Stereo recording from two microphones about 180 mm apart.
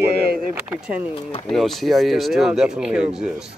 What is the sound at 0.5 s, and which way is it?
Speech, 10° right (ahead or behind).